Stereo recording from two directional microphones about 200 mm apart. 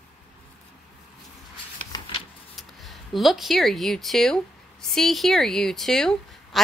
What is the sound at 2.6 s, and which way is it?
A woman's voice, centre (ahead or behind).